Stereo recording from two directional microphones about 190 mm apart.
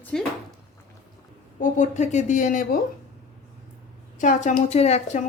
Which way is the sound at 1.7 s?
40° left (ahead or behind).